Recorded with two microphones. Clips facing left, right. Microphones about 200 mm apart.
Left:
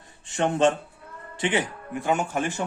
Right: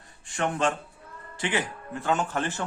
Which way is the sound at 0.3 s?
25° left (ahead or behind).